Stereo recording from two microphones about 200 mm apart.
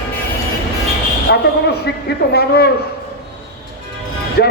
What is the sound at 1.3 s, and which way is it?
A woman's voice, 60° left (ahead or behind).